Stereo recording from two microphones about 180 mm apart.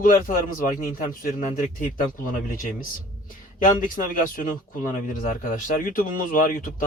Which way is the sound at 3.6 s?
50° left (ahead or behind).